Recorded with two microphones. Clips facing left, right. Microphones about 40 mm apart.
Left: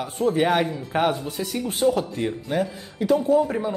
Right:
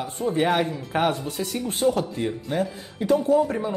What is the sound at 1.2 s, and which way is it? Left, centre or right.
Speech, left.